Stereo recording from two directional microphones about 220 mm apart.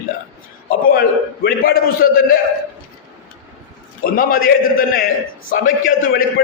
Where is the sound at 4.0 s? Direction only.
40° left (ahead or behind).